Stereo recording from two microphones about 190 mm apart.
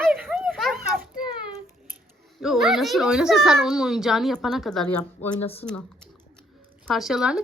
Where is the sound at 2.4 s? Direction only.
Centre (ahead or behind).